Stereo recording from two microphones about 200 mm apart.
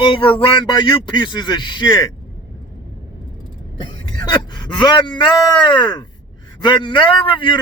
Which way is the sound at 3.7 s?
20° left (ahead or behind).